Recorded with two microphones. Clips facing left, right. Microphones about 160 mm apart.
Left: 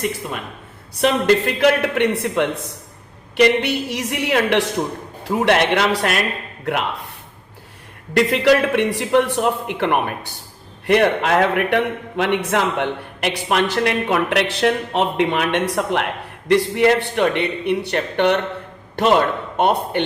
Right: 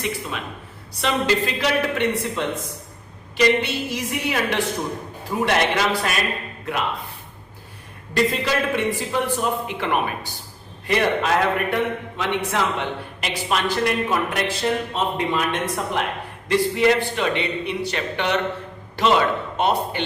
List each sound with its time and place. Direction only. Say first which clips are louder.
1.0 s a man's voice: left 5 dB; 55° left (ahead or behind)
8.1 s a man's voice: left 6 dB; 70° left (ahead or behind)